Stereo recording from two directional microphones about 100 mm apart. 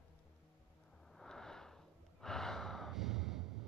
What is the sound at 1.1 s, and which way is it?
Gasp, 5° left (ahead or behind).